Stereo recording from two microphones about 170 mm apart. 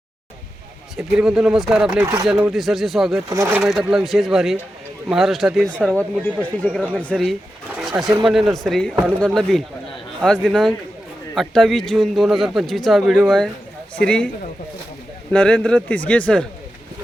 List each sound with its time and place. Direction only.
0.9 s a man's voice: 5° right (ahead or behind)
3.2 s speech: 15° right (ahead or behind)
3.6 s a man's voice: centre (ahead or behind)
7.8 s pigeon: 5° right (ahead or behind)
8.2 s a man's voice: centre (ahead or behind)
15.3 s a man's voice: 5° left (ahead or behind)